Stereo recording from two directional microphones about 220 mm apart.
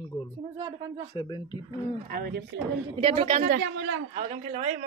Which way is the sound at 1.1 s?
20° left (ahead or behind).